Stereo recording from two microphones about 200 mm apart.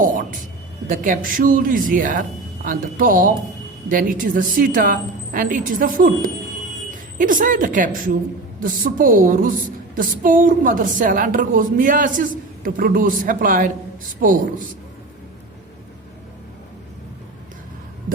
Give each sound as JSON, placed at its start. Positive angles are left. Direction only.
{"t": 0.0, "sound": "a woman's voice", "side_deg": -45}
{"t": 7.2, "sound": "a woman's voice", "side_deg": -45}